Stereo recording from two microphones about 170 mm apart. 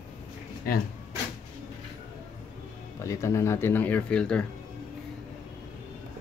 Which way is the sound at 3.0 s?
20° left (ahead or behind).